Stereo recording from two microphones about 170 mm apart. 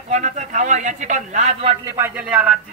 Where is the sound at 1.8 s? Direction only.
20° right (ahead or behind).